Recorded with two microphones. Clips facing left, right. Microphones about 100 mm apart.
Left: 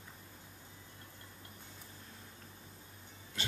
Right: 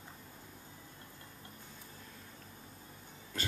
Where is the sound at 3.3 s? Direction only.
45° right (ahead or behind).